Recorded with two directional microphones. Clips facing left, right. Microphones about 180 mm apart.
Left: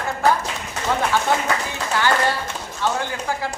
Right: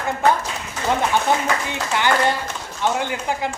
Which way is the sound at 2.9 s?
15° right (ahead or behind).